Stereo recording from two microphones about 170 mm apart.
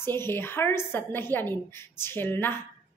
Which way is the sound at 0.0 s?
15° left (ahead or behind).